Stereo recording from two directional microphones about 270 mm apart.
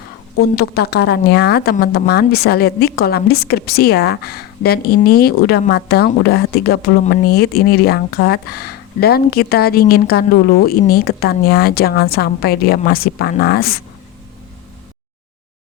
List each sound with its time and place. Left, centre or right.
0.5 s speech: left